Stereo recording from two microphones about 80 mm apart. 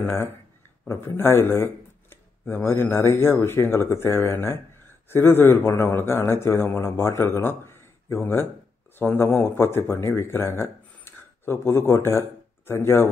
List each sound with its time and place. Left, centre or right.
0.0 s a man's voice: left